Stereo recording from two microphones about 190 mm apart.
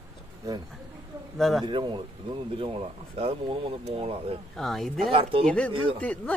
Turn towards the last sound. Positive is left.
turn(degrees=5)  # may be behind; listen again after turning